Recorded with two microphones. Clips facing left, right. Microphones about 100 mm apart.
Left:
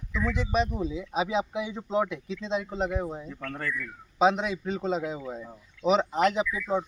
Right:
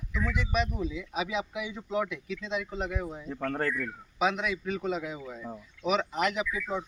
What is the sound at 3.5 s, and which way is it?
Speech, 60° right (ahead or behind).